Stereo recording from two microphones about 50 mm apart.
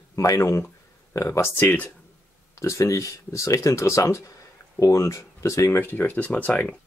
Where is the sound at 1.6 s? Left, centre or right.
Left.